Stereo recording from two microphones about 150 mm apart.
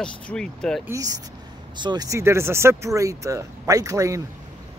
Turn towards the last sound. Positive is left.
turn(degrees=-20)  # may be behind; listen again after turning